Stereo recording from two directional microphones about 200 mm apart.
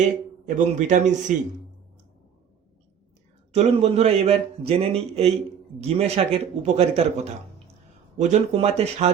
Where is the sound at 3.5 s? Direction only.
30° right (ahead or behind).